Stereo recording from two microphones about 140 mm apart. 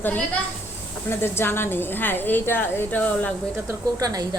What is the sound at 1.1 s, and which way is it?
A woman's voice, 15° left (ahead or behind).